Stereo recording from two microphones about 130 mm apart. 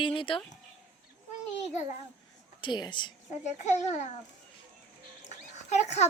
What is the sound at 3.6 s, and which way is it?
Speech, 60° left (ahead or behind).